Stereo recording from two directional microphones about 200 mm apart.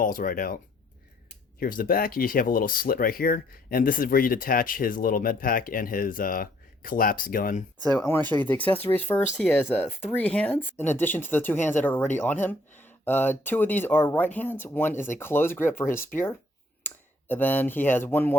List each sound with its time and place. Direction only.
0.0 s speech: 45° left (ahead or behind)
7.9 s speech: 10° left (ahead or behind)